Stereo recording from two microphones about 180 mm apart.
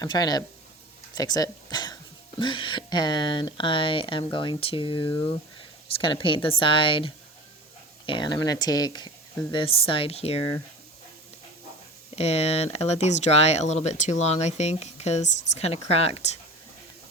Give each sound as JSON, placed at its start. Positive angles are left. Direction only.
{"t": 0.0, "sound": "speech", "side_deg": 20}
{"t": 1.1, "sound": "a sound", "side_deg": 20}
{"t": 2.4, "sound": "speech", "side_deg": 25}
{"t": 12.1, "sound": "speech", "side_deg": 35}